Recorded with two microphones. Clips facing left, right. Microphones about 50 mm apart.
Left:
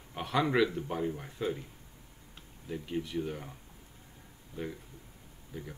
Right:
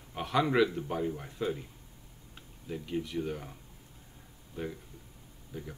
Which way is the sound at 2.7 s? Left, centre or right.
Centre.